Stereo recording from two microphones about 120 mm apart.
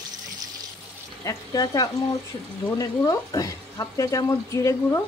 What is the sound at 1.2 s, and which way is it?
A woman's voice, 30° left (ahead or behind).